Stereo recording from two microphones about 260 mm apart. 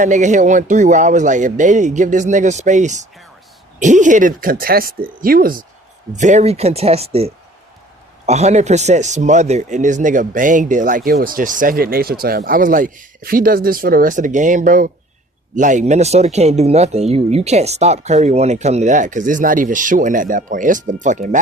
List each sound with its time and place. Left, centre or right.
0.0 s speech: right